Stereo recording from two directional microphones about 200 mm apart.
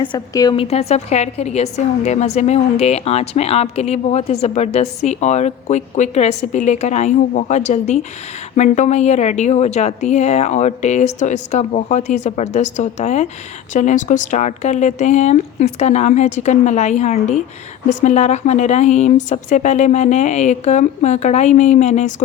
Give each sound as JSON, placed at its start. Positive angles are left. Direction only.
{"t": 0.0, "sound": "a woman's voice", "side_deg": 20}